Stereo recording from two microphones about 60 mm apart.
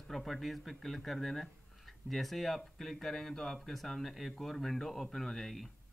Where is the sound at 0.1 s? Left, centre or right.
Centre.